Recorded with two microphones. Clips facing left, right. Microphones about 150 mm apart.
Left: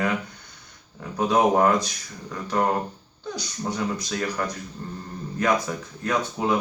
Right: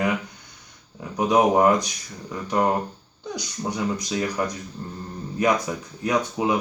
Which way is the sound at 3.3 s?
15° right (ahead or behind).